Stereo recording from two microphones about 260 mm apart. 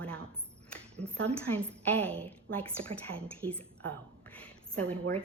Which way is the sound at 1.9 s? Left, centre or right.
Centre.